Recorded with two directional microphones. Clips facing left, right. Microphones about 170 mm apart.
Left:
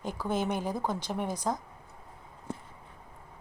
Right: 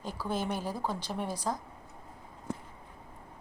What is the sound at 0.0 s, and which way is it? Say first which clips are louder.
A woman's voice: left 3 dB; 20° left (ahead or behind).